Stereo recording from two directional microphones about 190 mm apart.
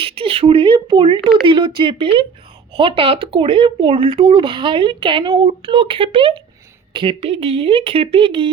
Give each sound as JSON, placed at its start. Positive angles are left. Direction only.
{"t": 0.0, "sound": "speech", "side_deg": -30}